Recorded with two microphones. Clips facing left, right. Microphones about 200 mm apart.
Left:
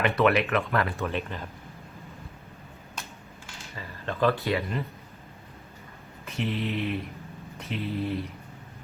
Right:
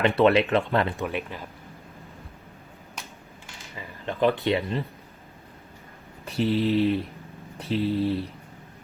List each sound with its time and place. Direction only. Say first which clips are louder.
0.0 s speech: right 4 dB; 30° right (ahead or behind)
1.0 s speech: right 1 dB; 10° right (ahead or behind)
3.8 s speech: right 2 dB; 15° right (ahead or behind)
6.2 s a sound: right 7 dB; 35° right (ahead or behind)